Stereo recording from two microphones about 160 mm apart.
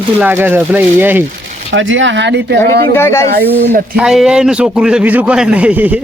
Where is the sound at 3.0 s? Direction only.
15° left (ahead or behind).